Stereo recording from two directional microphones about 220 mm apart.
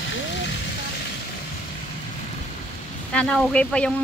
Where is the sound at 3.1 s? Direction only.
5° left (ahead or behind).